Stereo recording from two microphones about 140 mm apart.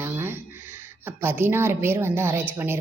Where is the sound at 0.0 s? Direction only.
15° right (ahead or behind).